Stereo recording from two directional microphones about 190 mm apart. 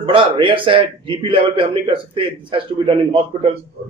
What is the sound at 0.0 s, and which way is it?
A man's voice, 25° right (ahead or behind).